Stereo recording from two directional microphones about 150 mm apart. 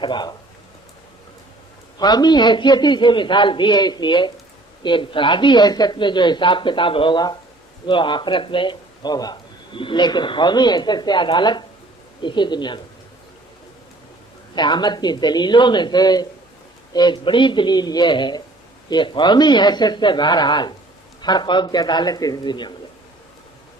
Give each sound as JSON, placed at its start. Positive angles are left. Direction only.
{"t": 0.0, "sound": "speech", "side_deg": 30}
{"t": 2.0, "sound": "a man's voice", "side_deg": 25}
{"t": 14.5, "sound": "a man's voice", "side_deg": 30}